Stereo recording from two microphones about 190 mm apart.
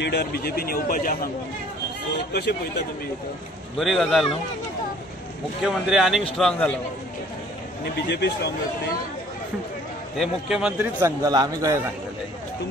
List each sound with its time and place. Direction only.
0.0 s speech: 55° left (ahead or behind)
3.7 s speech: centre (ahead or behind)
5.6 s speech: centre (ahead or behind)
7.8 s speech: 60° left (ahead or behind)
10.1 s a man's voice: centre (ahead or behind); by 11.8 s 20° right (ahead or behind)